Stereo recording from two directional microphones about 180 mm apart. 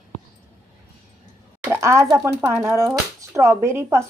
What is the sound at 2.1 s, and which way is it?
Speech, 15° right (ahead or behind).